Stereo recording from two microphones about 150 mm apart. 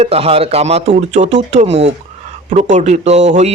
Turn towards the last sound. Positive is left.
turn(degrees=-50)  # may be behind; listen again after turning